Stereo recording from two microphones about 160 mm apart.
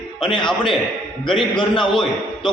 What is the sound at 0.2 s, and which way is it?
A man's voice, 30° left (ahead or behind).